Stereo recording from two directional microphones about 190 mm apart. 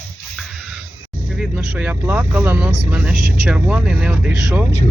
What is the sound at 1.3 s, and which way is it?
Speech, 5° right (ahead or behind).